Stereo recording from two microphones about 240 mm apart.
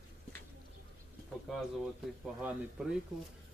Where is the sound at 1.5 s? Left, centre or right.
Centre.